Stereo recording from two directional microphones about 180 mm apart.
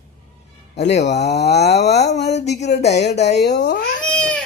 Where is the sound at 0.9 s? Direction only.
40° left (ahead or behind).